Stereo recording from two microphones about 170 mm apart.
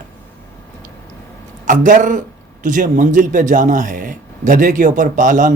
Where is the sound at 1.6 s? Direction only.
50° right (ahead or behind).